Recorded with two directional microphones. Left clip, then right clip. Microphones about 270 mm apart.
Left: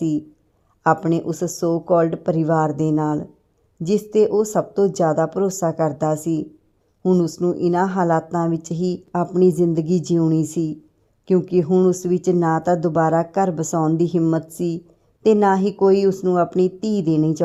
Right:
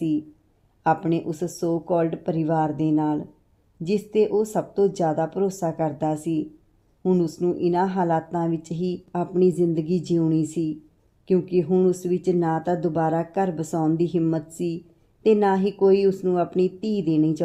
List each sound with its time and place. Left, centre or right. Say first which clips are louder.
0.9 s speech: left 4 dB; left